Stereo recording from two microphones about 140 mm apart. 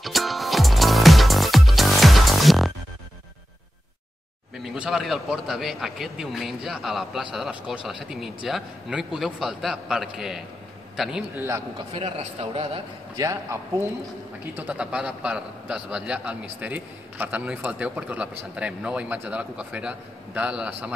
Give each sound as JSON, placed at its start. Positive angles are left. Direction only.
{"t": 0.0, "sound": "music", "side_deg": 0}
{"t": 4.7, "sound": "a man's voice", "side_deg": -5}
{"t": 12.2, "sound": "a man's voice", "side_deg": -45}
{"t": 13.2, "sound": "a man's voice", "side_deg": -20}
{"t": 14.5, "sound": "a man's voice", "side_deg": -10}